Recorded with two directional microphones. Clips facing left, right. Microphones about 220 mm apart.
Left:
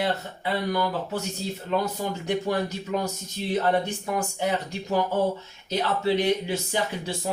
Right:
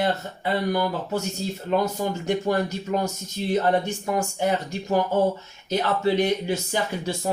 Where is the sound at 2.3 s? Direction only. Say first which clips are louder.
Right 2 dB; 45° right (ahead or behind).